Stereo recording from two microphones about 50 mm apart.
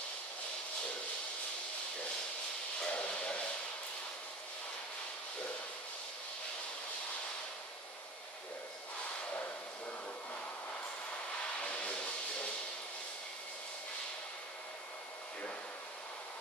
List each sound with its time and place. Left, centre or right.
2.8 s hiss: left
11.6 s hiss: left